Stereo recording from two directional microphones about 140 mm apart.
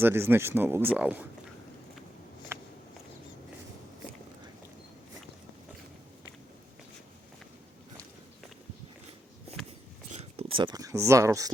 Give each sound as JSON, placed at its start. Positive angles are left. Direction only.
{"t": 0.0, "sound": "speech", "side_deg": -15}
{"t": 2.5, "sound": "walk", "side_deg": -15}
{"t": 10.1, "sound": "a sound", "side_deg": -45}
{"t": 10.6, "sound": "speech", "side_deg": -25}